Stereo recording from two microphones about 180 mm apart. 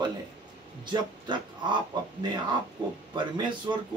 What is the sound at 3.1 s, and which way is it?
Speech, 25° right (ahead or behind).